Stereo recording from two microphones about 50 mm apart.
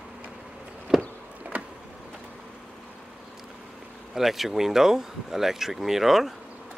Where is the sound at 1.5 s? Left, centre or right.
Right.